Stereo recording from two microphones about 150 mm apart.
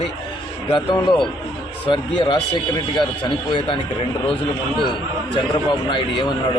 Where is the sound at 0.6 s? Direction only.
30° left (ahead or behind).